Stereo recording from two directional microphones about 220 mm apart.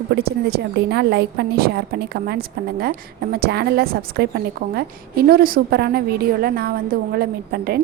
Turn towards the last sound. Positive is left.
turn(degrees=-45)  # may be behind; listen again after turning